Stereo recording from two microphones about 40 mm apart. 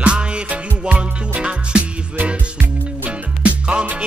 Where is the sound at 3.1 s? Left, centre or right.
Right.